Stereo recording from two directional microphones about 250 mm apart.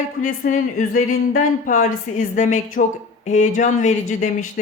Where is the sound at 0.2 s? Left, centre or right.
Left.